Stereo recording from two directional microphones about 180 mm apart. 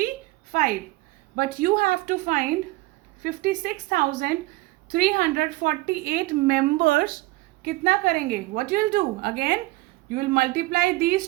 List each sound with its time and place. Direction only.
0.5 s a woman's voice: 50° right (ahead or behind)